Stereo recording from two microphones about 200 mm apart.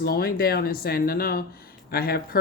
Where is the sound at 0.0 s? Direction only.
50° left (ahead or behind).